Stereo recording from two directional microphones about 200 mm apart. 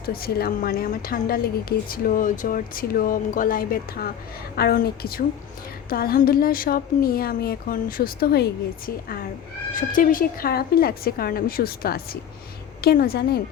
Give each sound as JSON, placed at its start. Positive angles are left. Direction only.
{"t": 0.0, "sound": "a woman's voice", "side_deg": 50}
{"t": 9.7, "sound": "a woman's voice", "side_deg": 45}